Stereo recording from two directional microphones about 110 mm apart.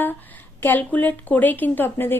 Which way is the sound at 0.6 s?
15° left (ahead or behind).